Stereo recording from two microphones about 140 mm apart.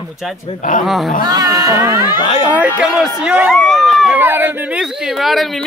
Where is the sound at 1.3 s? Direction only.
25° right (ahead or behind).